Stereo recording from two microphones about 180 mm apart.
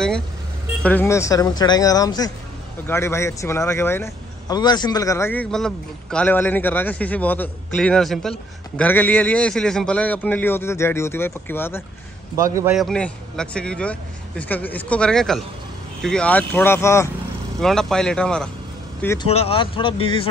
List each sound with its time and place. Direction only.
0.8 s speech: 10° left (ahead or behind)
12.4 s a man's voice: 15° right (ahead or behind)
12.7 s a man's voice: centre (ahead or behind)
17.6 s a man's voice: centre (ahead or behind)
19.1 s speech: 35° left (ahead or behind)